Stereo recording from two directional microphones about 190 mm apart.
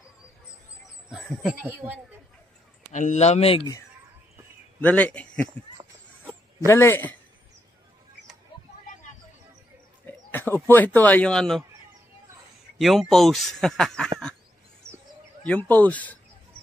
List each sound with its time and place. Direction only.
1.0 s speech: centre (ahead or behind)
2.9 s speech: 40° left (ahead or behind); by 3.8 s 25° left (ahead or behind)
4.8 s speech: 5° left (ahead or behind)
6.7 s speech: 10° left (ahead or behind)
10.0 s speech: 10° left (ahead or behind)
12.7 s speech: centre (ahead or behind)
14.8 s bird: 15° right (ahead or behind)
15.4 s speech: 10° left (ahead or behind)